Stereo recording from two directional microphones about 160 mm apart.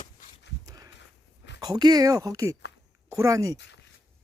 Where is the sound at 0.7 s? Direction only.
20° right (ahead or behind).